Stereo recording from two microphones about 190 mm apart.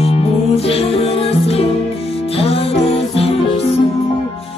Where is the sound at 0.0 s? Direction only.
30° left (ahead or behind).